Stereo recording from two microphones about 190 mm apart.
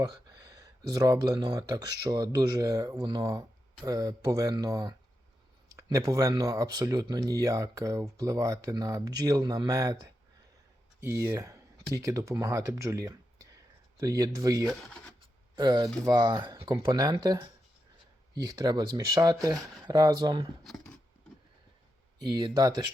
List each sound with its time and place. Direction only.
0.0 s speech: 20° right (ahead or behind)
14.7 s speech: 5° left (ahead or behind)
15.5 s speech: 25° right (ahead or behind)
20.7 s a sound: centre (ahead or behind)
22.3 s speech: 25° right (ahead or behind)